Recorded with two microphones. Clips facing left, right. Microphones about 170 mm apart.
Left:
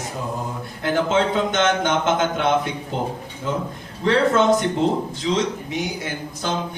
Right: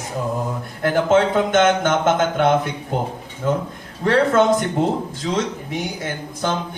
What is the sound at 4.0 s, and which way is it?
A man's voice, 55° right (ahead or behind).